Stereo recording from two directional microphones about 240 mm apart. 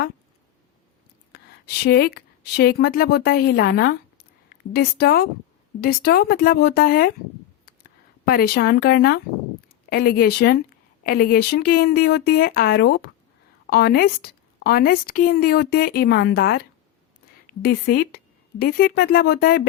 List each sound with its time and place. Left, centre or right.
1.3 s a woman's voice: left
8.2 s a woman's voice: left